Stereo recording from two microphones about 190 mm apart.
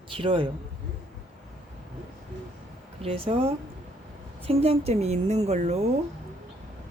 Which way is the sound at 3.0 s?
30° right (ahead or behind).